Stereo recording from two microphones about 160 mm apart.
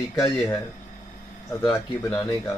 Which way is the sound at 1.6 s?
20° left (ahead or behind).